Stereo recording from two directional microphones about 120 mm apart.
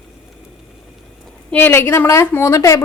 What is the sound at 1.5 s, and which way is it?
Speech, 15° left (ahead or behind).